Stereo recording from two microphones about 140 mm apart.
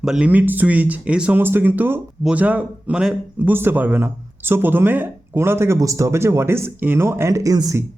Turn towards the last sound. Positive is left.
turn(degrees=-25)  # may be behind; listen again after turning